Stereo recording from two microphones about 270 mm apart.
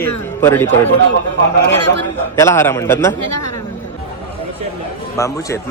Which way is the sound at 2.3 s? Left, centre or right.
Centre.